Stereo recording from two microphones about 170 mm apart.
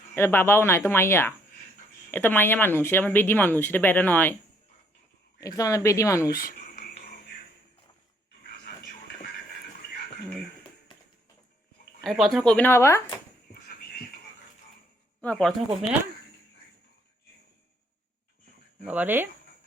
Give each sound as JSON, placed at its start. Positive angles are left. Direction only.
{"t": 0.1, "sound": "speech", "side_deg": 10}
{"t": 5.4, "sound": "speech", "side_deg": 20}
{"t": 6.3, "sound": "a sound", "side_deg": 60}
{"t": 12.0, "sound": "speech", "side_deg": 0}
{"t": 15.2, "sound": "speech", "side_deg": 5}
{"t": 18.8, "sound": "speech", "side_deg": -10}